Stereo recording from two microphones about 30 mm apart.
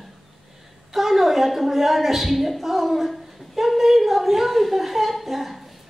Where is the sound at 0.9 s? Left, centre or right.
Centre.